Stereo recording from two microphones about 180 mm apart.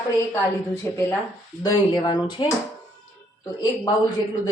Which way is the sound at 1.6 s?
20° left (ahead or behind).